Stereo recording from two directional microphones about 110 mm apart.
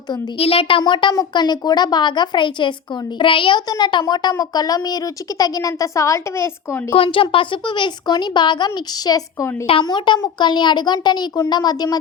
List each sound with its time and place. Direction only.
0.3 s a child's voice: 60° left (ahead or behind)
0.8 s a woman's voice: 45° left (ahead or behind); by 6.8 s 25° left (ahead or behind)
6.9 s a woman's voice: 55° left (ahead or behind); by 11.9 s 35° left (ahead or behind)